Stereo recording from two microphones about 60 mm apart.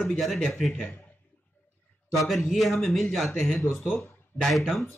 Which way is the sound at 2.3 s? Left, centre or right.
Centre.